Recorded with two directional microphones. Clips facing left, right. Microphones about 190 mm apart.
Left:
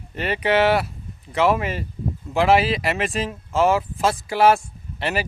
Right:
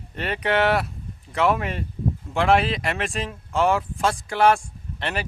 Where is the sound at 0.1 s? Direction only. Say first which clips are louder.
Left 3 dB; 5° left (ahead or behind).